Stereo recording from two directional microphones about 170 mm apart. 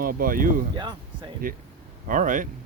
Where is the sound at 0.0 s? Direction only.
55° right (ahead or behind).